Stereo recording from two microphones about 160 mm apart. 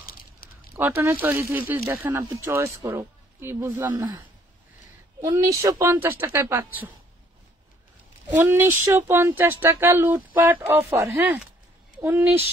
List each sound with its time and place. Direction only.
0.0 s a sound: 70° left (ahead or behind)
0.7 s speech: 15° right (ahead or behind)
3.8 s speech: 25° right (ahead or behind)
8.4 s speech: 15° right (ahead or behind)